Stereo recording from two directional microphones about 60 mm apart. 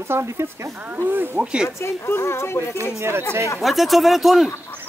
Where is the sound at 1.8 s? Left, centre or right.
Left.